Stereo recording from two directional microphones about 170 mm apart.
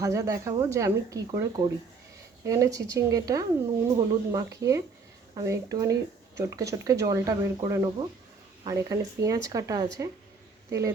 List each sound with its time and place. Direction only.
0.0 s speech: 20° right (ahead or behind)